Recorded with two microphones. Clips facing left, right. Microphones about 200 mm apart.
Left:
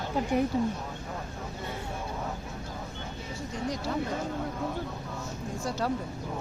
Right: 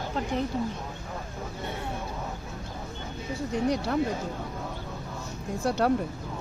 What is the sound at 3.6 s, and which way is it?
Speech, 65° right (ahead or behind).